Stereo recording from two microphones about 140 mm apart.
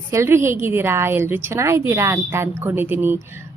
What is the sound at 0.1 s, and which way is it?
A woman's voice, 20° right (ahead or behind).